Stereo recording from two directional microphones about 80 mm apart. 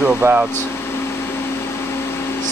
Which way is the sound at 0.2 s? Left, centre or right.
Right.